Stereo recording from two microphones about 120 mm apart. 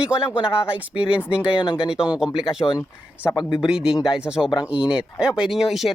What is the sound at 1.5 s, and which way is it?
Speech, 45° left (ahead or behind).